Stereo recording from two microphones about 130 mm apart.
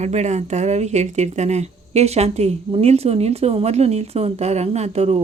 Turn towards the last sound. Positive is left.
turn(degrees=-55)  # may be behind; listen again after turning